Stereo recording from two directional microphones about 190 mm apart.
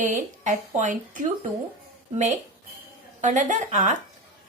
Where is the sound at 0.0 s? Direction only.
40° right (ahead or behind).